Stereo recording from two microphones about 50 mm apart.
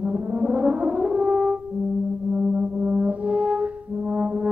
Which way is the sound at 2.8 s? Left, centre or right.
Right.